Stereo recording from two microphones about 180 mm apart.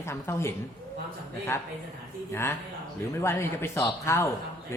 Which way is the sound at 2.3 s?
15° left (ahead or behind).